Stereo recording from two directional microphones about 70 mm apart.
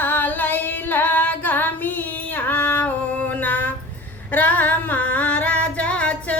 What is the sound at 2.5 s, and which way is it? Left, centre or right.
Singing, left.